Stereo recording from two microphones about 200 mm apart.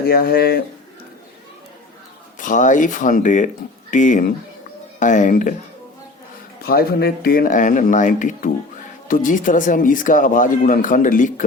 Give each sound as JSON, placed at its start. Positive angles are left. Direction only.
{"t": 0.0, "sound": "speech", "side_deg": 50}
{"t": 2.4, "sound": "speech", "side_deg": 40}
{"t": 6.6, "sound": "speech", "side_deg": 50}